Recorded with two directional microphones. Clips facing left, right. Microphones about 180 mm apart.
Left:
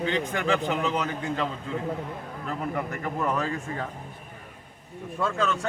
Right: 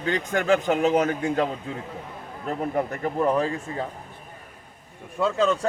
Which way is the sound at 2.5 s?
35° right (ahead or behind).